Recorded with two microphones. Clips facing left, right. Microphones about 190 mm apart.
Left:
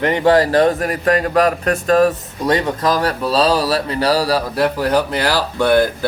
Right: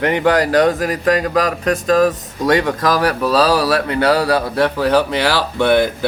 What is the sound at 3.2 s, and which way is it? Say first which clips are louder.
Speech: right 1 dB; 30° left (ahead or behind).